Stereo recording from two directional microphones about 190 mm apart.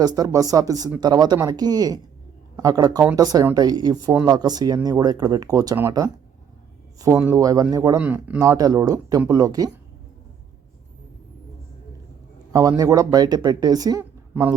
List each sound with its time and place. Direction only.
0.0 s speech: 20° right (ahead or behind)
7.2 s speech: 15° right (ahead or behind)
12.5 s speech: 20° right (ahead or behind)
14.0 s a sound: 10° right (ahead or behind)